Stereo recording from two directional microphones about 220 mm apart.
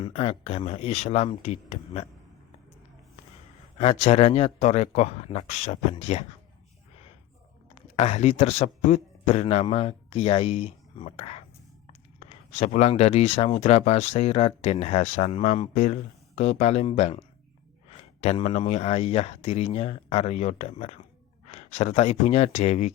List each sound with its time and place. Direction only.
0.0 s speech: 25° left (ahead or behind)
3.8 s speech: 30° left (ahead or behind)
7.8 s speech: 30° left (ahead or behind)